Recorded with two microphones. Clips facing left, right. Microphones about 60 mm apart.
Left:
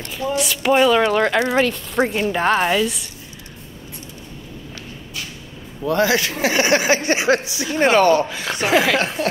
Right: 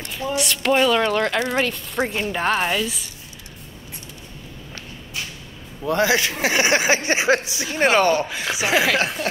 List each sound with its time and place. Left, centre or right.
0.4 s a woman's voice: centre
5.9 s a man's voice: right
8.3 s a woman's voice: centre